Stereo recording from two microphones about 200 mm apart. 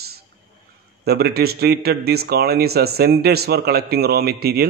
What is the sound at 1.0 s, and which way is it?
Speech, 50° right (ahead or behind).